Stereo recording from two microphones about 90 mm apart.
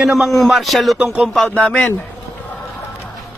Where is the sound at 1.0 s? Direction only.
10° right (ahead or behind).